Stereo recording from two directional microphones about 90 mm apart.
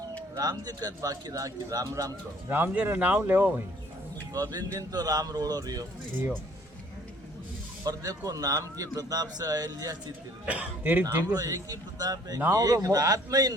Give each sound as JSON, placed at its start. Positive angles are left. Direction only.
{"t": 0.3, "sound": "a man's voice", "side_deg": -45}
{"t": 2.5, "sound": "speech", "side_deg": -20}
{"t": 4.4, "sound": "a man's voice", "side_deg": -45}
{"t": 7.9, "sound": "a man's voice", "side_deg": -40}
{"t": 10.4, "sound": "a man's voice", "side_deg": -15}
{"t": 11.3, "sound": "a man's voice", "side_deg": -45}